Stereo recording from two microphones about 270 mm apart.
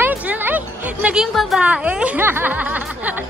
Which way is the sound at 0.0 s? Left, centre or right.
Centre.